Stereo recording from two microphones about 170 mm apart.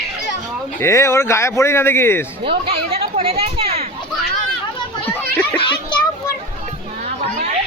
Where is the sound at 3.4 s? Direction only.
35° right (ahead or behind).